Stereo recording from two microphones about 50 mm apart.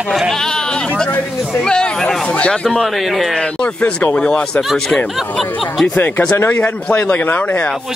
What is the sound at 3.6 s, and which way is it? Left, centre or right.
Speech, left.